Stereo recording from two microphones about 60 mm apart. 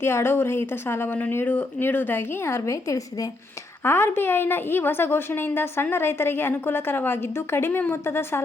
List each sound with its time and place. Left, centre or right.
0.0 s a woman's voice: left
3.8 s a woman's voice: left